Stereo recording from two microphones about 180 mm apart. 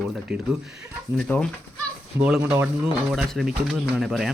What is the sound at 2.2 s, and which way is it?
Speech, 5° right (ahead or behind).